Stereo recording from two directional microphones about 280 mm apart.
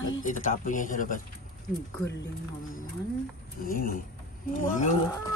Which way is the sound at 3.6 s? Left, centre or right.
Left.